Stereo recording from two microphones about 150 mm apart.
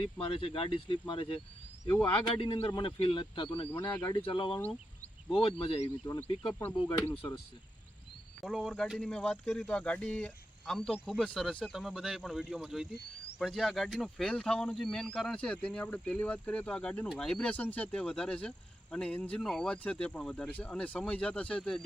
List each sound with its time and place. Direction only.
0.0 s speech: 40° left (ahead or behind)
1.8 s speech: 20° left (ahead or behind)
2.0 s speech: 35° left (ahead or behind)
3.7 s speech: 15° left (ahead or behind)
4.1 s speech: 35° left (ahead or behind)
8.4 s speech: 5° left (ahead or behind)